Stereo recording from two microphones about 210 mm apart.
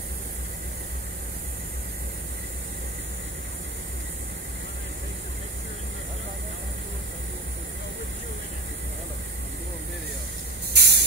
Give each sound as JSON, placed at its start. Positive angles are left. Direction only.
{"t": 10.7, "sound": "spray", "side_deg": -50}